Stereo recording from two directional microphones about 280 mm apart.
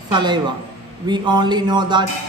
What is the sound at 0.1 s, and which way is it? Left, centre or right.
A man's voice, centre.